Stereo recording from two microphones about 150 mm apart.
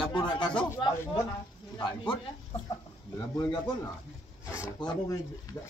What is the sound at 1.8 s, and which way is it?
Speech, 35° left (ahead or behind).